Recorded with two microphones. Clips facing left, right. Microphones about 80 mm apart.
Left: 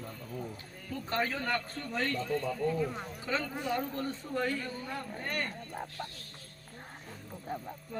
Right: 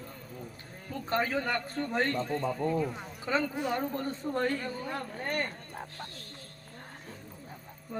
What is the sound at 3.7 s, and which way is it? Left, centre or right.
Speech, right.